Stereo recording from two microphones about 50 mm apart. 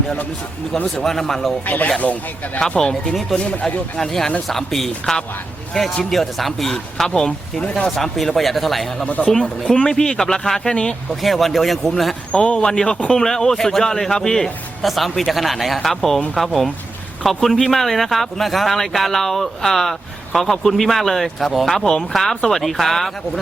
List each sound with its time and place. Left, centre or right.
1.0 s a man's voice: centre
1.6 s speech: left
2.6 s a man's voice: centre
3.9 s a man's voice: centre
9.2 s a man's voice: centre
12.5 s a man's voice: centre